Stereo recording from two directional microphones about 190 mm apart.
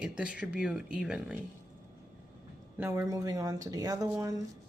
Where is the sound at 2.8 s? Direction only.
15° right (ahead or behind).